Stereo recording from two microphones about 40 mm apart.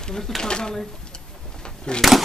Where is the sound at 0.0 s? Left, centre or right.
Centre.